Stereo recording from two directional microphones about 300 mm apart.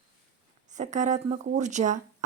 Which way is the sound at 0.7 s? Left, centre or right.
Right.